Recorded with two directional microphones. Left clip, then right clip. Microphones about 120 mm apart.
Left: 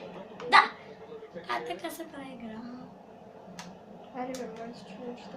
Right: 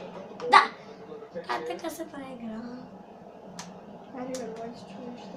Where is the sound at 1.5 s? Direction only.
45° right (ahead or behind).